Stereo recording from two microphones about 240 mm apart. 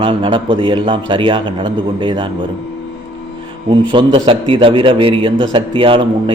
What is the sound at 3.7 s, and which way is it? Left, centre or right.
A man's voice, right.